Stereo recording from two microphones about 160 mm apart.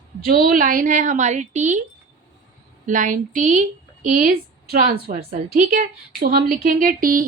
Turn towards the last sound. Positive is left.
turn(degrees=-60)  # may be behind; listen again after turning